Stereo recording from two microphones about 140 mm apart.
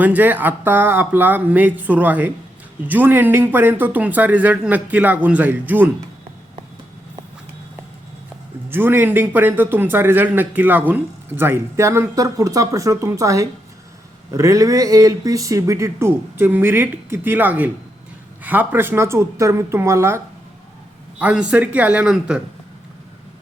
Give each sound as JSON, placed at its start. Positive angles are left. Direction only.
{"t": 0.0, "sound": "a man's voice", "side_deg": -15}
{"t": 8.7, "sound": "a man's voice", "side_deg": -15}
{"t": 21.2, "sound": "a man's voice", "side_deg": -10}